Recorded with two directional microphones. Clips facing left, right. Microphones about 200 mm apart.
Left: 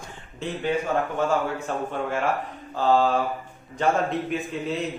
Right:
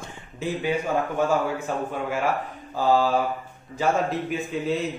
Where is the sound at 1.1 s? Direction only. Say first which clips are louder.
Right 1 dB; 10° right (ahead or behind).